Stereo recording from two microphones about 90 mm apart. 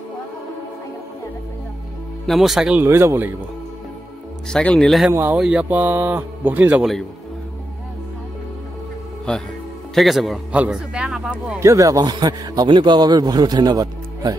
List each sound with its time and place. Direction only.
2.2 s speech: centre (ahead or behind)
2.8 s speech: 25° right (ahead or behind)
4.5 s speech: 5° left (ahead or behind)
5.1 s speech: 25° right (ahead or behind)
5.4 s speech: 10° right (ahead or behind)
9.3 s speech: 10° left (ahead or behind)
10.5 s speech: 15° right (ahead or behind)
11.6 s a man's voice: 35° right (ahead or behind)